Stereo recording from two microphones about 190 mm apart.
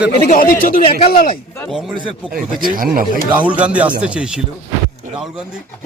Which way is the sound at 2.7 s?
45° right (ahead or behind).